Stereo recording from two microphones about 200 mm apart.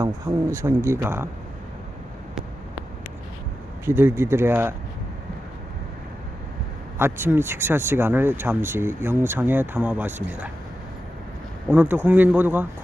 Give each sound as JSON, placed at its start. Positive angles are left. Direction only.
{"t": 0.5, "sound": "speech", "side_deg": -15}
{"t": 3.8, "sound": "speech", "side_deg": -10}
{"t": 7.0, "sound": "speech", "side_deg": -10}
{"t": 11.7, "sound": "speech", "side_deg": -10}